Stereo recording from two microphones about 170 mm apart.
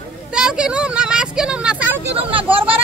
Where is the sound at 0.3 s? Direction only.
5° right (ahead or behind).